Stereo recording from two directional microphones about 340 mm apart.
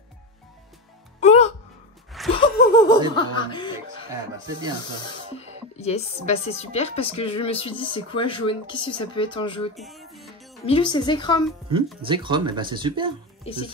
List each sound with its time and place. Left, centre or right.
1.2 s music: centre
2.3 s laughter: centre
3.2 s speech: centre
5.0 s speech: centre
9.8 s music: centre
10.6 s speech: centre
12.0 s speech: centre
13.4 s music: centre